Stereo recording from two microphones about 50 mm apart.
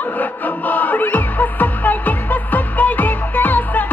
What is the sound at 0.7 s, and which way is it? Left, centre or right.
Music, left.